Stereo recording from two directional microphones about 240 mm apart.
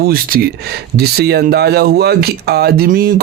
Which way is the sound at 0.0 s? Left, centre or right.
Right.